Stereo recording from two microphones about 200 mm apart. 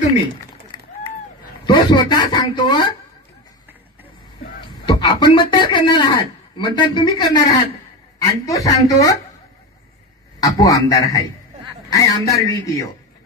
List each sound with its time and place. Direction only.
1.7 s speech: 20° left (ahead or behind)
4.6 s speech: 25° left (ahead or behind)
10.4 s speech: 15° left (ahead or behind)